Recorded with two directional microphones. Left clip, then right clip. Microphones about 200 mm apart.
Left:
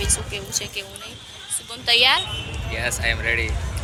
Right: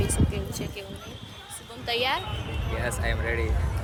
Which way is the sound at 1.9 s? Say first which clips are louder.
Left 10 dB; 5° left (ahead or behind).